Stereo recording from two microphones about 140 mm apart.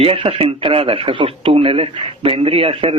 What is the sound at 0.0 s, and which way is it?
Speech, 45° right (ahead or behind).